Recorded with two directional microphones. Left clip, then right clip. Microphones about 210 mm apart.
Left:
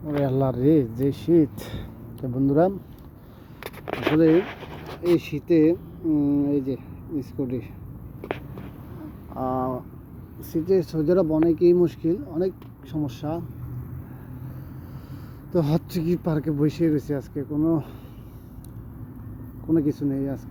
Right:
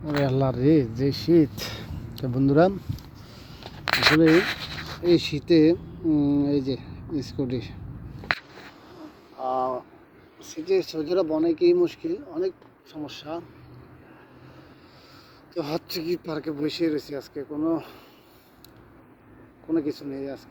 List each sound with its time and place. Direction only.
0.2 s speech: centre (ahead or behind)
3.9 s a sound: 75° right (ahead or behind)
4.3 s speech: 65° right (ahead or behind)
5.1 s speech: centre (ahead or behind)
9.4 s speech: 15° right (ahead or behind)
10.7 s speech: centre (ahead or behind)
15.5 s speech: centre (ahead or behind)
19.6 s speech: centre (ahead or behind)